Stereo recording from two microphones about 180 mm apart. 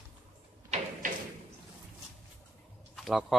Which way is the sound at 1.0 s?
50° right (ahead or behind).